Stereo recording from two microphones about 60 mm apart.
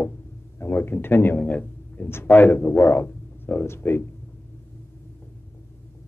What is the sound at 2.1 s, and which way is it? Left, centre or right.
A man's voice, left.